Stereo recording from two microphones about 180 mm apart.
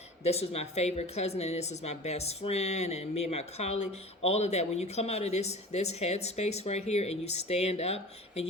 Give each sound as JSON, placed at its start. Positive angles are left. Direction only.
{"t": 0.2, "sound": "a woman's voice", "side_deg": 35}